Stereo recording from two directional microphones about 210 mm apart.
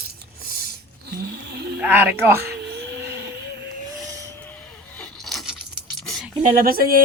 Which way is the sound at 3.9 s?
5° left (ahead or behind).